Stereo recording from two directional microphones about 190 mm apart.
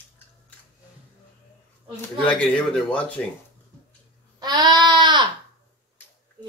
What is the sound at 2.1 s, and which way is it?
Speech, 5° left (ahead or behind).